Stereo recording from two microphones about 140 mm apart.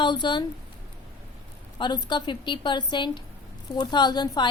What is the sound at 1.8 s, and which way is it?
A woman's voice, 30° left (ahead or behind).